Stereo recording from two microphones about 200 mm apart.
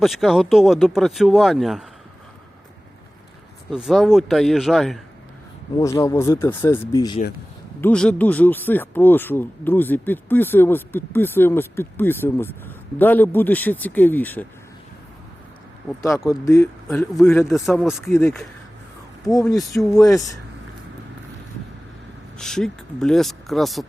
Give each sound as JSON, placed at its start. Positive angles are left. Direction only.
{"t": 0.0, "sound": "speech", "side_deg": 0}
{"t": 3.7, "sound": "speech", "side_deg": 0}
{"t": 5.8, "sound": "speech", "side_deg": 15}
{"t": 7.8, "sound": "speech", "side_deg": 5}
{"t": 16.0, "sound": "speech", "side_deg": 15}
{"t": 16.9, "sound": "speech", "side_deg": 5}
{"t": 18.1, "sound": "speech", "side_deg": 15}
{"t": 19.7, "sound": "speech", "side_deg": 0}
{"t": 22.4, "sound": "speech", "side_deg": 5}